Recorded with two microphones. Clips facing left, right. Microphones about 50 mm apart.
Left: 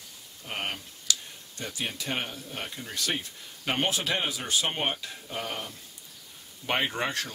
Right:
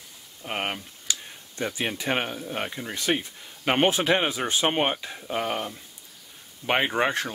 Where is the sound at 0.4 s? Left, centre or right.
Right.